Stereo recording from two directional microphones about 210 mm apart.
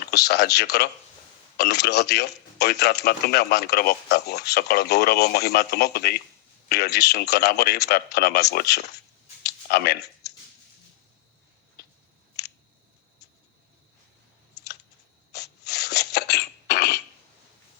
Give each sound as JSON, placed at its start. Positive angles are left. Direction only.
{"t": 0.1, "sound": "speech", "side_deg": 50}
{"t": 9.4, "sound": "clicking", "side_deg": 50}
{"t": 15.3, "sound": "cough", "side_deg": 50}